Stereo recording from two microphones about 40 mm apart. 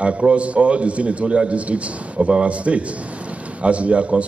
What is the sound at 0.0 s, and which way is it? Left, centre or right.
A man's voice, right.